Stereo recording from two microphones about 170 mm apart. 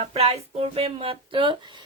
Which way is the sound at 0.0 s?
35° right (ahead or behind).